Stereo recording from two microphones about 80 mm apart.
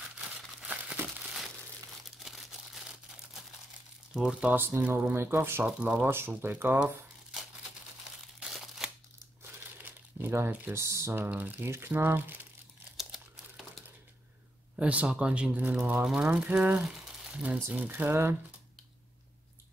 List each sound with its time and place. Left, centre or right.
0.6 s crumpling: centre
1.0 s crushing: centre
2.1 s a sound: centre
4.2 s speech: centre
4.6 s speech: right
5.7 s speech: centre
6.0 s speech: right
8.4 s a sound: centre
9.4 s crumpling: right
10.7 s speech: right
11.1 s speech: right
14.8 s speech: centre
17.0 s crumpling: centre
17.7 s speech: right